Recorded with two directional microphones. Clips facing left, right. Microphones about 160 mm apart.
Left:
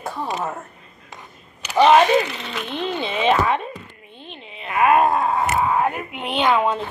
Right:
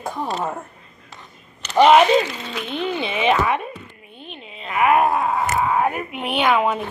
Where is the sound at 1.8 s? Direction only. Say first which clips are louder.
Right 1 dB; 15° right (ahead or behind).